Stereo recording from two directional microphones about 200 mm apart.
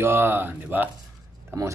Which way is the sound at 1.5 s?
15° right (ahead or behind).